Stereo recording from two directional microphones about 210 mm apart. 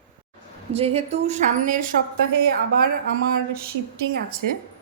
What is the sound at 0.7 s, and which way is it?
A woman's voice, 30° right (ahead or behind).